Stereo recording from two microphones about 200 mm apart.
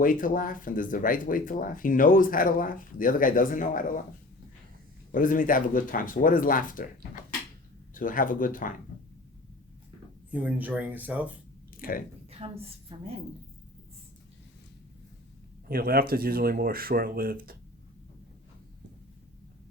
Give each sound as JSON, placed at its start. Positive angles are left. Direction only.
{"t": 0.0, "sound": "speech", "side_deg": 45}
{"t": 5.1, "sound": "speech", "side_deg": 40}
{"t": 7.9, "sound": "speech", "side_deg": 45}
{"t": 10.3, "sound": "speech", "side_deg": -10}
{"t": 11.8, "sound": "speech", "side_deg": 45}
{"t": 12.4, "sound": "a woman's voice", "side_deg": -30}
{"t": 15.7, "sound": "speech", "side_deg": -50}